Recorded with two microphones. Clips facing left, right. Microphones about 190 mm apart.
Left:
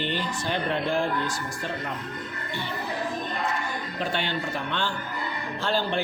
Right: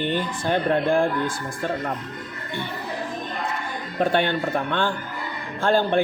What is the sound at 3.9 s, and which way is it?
A man's voice, 55° right (ahead or behind).